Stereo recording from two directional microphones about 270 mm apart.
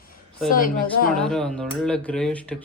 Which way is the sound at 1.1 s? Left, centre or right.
Centre.